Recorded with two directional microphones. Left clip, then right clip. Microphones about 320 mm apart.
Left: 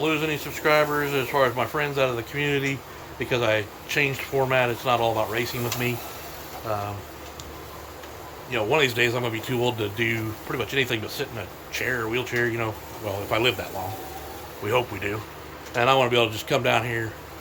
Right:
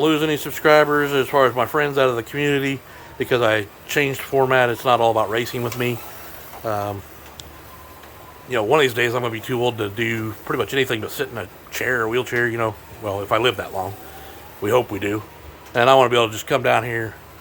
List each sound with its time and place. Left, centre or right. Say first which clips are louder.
0.0 s speech: right 6 dB; centre
8.4 s speech: right 5 dB; centre